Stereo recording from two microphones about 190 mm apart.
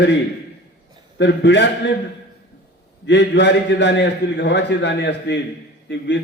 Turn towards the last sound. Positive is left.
turn(degrees=70)  # may be behind; listen again after turning